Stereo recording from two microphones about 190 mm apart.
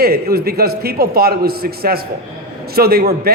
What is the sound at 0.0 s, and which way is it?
A man's voice, 55° right (ahead or behind).